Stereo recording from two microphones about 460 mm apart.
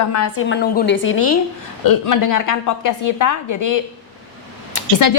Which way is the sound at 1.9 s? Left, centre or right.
Left.